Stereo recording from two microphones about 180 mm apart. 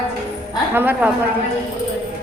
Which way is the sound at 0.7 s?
10° right (ahead or behind).